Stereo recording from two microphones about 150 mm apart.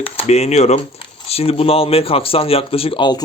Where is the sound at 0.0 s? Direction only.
45° left (ahead or behind).